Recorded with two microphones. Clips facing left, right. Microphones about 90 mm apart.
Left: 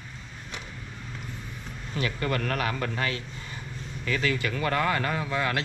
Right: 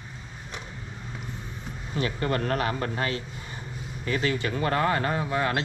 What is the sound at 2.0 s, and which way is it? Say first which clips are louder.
Speech: right 2 dB; 30° right (ahead or behind).